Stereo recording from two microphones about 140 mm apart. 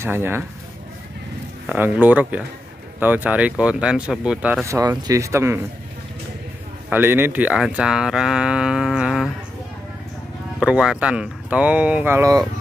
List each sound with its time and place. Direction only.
0.0 s speech: 15° right (ahead or behind)
1.7 s speech: 10° right (ahead or behind)
4.6 s speech: 25° right (ahead or behind)
6.9 s speech: 15° right (ahead or behind)
10.6 s speech: 5° right (ahead or behind); by 12.4 s 20° right (ahead or behind)